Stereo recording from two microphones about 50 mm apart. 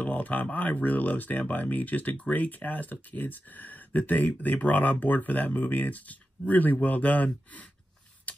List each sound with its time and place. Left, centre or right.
0.0 s speech: left